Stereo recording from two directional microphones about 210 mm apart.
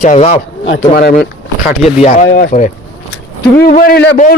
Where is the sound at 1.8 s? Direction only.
35° left (ahead or behind).